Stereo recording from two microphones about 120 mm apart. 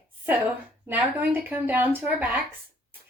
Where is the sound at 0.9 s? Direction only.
15° right (ahead or behind).